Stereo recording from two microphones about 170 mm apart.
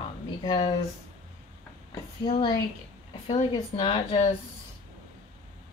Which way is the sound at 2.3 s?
30° left (ahead or behind).